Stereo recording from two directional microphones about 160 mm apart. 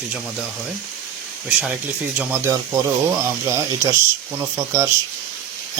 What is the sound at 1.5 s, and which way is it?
Speech, 5° right (ahead or behind).